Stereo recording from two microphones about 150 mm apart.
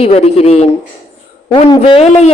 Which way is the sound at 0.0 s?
45° left (ahead or behind).